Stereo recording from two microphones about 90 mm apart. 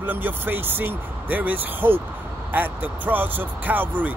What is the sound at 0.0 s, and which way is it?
Speech, 20° right (ahead or behind).